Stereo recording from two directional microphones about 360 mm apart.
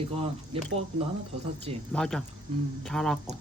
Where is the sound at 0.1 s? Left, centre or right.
Centre.